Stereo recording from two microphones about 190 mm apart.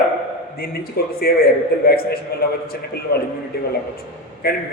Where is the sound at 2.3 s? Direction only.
55° left (ahead or behind).